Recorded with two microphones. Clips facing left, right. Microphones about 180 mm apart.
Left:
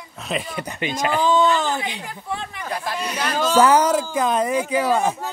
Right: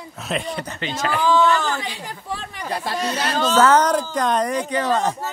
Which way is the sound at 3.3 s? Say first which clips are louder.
Left 1 dB; 10° left (ahead or behind).